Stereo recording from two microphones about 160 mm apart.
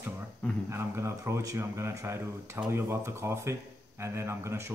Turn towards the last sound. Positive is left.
turn(degrees=-15)  # may be behind; listen again after turning